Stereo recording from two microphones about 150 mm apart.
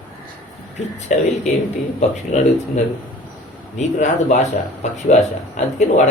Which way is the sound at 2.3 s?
50° left (ahead or behind).